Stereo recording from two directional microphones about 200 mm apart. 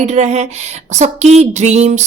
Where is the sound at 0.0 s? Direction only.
35° right (ahead or behind).